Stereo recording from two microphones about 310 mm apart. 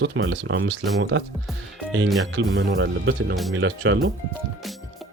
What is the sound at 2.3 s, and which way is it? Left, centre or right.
Speech, right.